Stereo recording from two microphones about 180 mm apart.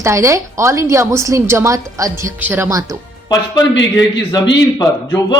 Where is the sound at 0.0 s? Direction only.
15° right (ahead or behind).